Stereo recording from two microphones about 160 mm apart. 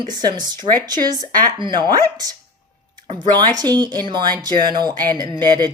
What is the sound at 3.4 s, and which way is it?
Speech, 25° right (ahead or behind).